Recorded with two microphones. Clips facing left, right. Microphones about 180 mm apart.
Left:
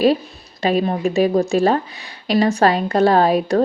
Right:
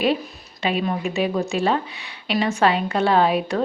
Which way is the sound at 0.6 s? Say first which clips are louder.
Left 5 dB; 40° left (ahead or behind).